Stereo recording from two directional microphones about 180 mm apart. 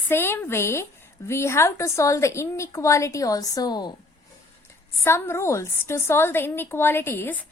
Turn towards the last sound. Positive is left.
turn(degrees=10)  # may be behind; listen again after turning